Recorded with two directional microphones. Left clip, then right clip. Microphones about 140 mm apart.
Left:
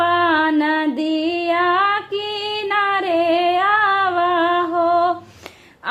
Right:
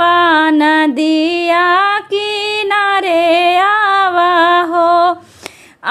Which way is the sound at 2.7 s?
35° right (ahead or behind).